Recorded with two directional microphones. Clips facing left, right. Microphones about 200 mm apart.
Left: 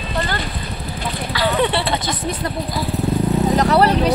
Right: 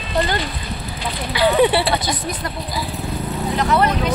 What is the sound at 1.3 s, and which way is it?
Speech, 10° right (ahead or behind).